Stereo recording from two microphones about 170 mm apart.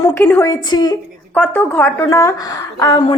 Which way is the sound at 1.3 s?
15° left (ahead or behind).